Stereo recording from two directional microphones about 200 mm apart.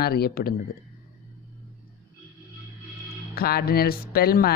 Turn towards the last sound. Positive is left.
turn(degrees=50)  # may be behind; listen again after turning